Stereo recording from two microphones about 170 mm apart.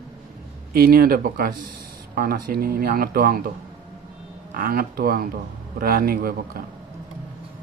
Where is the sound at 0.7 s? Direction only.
60° right (ahead or behind).